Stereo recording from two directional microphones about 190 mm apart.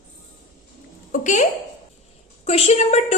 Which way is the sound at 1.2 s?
40° left (ahead or behind).